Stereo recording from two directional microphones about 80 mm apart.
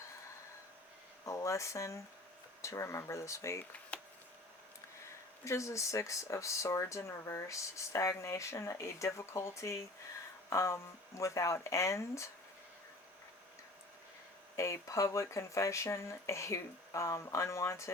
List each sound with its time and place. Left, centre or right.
1.2 s speech: left
3.6 s a sound: centre
5.5 s speech: left
14.5 s speech: left